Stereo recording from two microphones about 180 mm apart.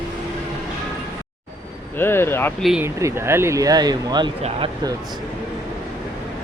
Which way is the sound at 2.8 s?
15° right (ahead or behind).